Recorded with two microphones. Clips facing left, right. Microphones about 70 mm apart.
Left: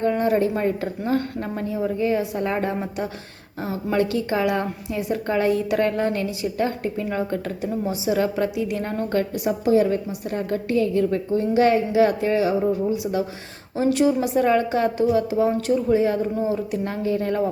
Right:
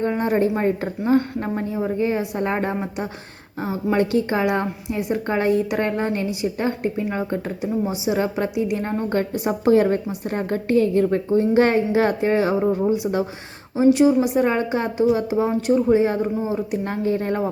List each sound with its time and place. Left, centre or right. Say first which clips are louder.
0.1 s a woman's voice: even; right
9.6 s a woman's voice: right 2 dB; right
13.7 s a woman's voice: right 4 dB; centre; by 17.5 s right